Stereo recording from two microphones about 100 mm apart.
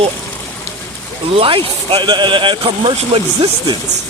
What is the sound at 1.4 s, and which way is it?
Speech, 65° right (ahead or behind).